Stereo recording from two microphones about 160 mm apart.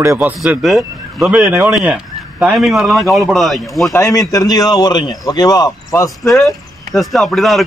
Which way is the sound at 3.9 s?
20° left (ahead or behind).